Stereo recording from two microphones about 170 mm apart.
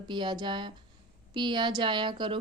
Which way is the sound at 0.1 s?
25° right (ahead or behind).